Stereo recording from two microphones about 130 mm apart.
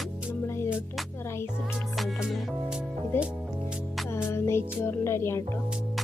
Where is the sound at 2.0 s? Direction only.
5° right (ahead or behind).